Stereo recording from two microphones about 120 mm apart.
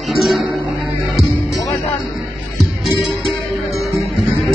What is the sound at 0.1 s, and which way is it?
Music, centre (ahead or behind).